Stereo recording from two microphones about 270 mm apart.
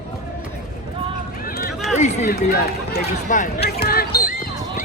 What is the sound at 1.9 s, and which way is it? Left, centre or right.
Speech, left.